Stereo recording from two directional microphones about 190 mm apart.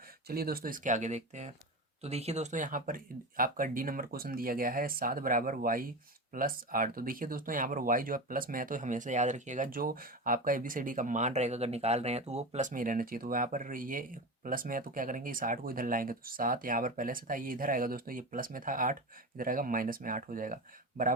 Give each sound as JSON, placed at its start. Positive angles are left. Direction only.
{"t": 0.3, "sound": "speech", "side_deg": -55}